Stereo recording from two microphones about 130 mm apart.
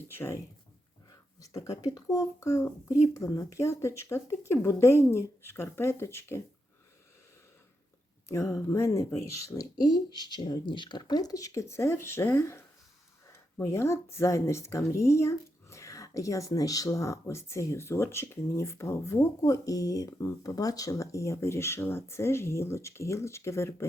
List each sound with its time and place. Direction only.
0.1 s speech: 15° left (ahead or behind)
1.4 s speech: 25° left (ahead or behind)
8.3 s speech: 25° left (ahead or behind)